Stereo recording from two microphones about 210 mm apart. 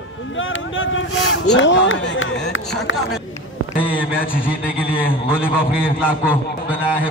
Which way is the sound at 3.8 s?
5° right (ahead or behind).